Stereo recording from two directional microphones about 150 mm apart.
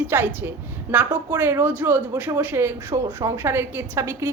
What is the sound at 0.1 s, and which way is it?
A woman's voice, 15° right (ahead or behind).